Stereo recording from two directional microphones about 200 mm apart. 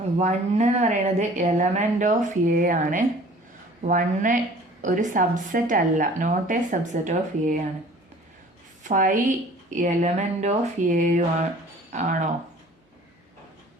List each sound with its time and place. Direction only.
0.2 s a woman's voice: 35° right (ahead or behind)
8.8 s a woman's voice: 40° right (ahead or behind)